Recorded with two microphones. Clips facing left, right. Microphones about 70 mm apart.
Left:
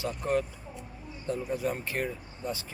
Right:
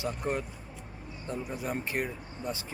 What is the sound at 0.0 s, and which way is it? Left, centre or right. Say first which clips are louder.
Speech: left 3 dB; right.